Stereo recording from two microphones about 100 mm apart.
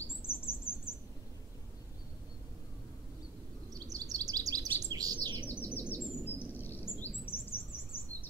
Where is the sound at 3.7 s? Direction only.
35° right (ahead or behind).